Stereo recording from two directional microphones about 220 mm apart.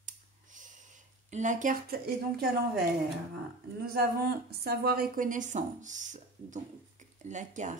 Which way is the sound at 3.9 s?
45° right (ahead or behind).